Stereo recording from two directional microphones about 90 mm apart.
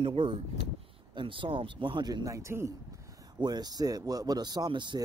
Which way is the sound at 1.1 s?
65° right (ahead or behind).